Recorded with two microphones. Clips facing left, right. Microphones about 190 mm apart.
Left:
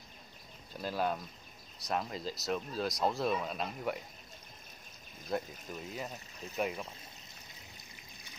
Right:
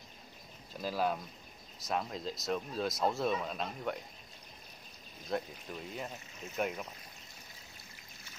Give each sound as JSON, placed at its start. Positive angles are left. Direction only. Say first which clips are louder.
{"t": 0.7, "sound": "speech", "louder": "right 1 dB", "side_deg": 0}
{"t": 5.3, "sound": "speech", "louder": "even", "side_deg": 0}
{"t": 7.9, "sound": "boat", "louder": "left 1 dB", "side_deg": 15}